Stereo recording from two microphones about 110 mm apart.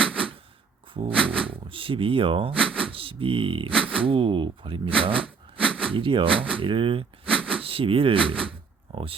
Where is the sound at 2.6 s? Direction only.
10° left (ahead or behind).